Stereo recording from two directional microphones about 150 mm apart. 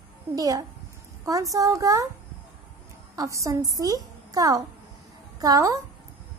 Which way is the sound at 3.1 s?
20° right (ahead or behind).